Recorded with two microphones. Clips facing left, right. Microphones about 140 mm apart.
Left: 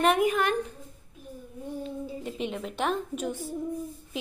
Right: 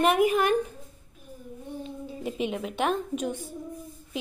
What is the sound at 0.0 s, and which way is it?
Speech, 10° right (ahead or behind).